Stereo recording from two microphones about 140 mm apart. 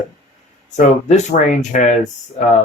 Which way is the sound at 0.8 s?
60° left (ahead or behind).